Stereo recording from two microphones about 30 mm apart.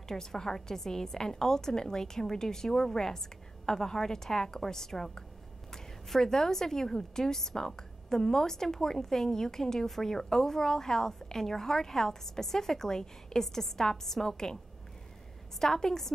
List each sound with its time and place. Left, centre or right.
0.1 s a woman's voice: centre
15.6 s a woman's voice: centre